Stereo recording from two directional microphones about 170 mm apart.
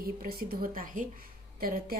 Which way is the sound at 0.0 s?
65° right (ahead or behind).